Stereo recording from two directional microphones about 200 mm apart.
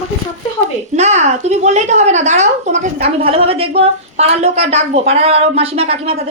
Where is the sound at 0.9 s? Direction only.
35° right (ahead or behind).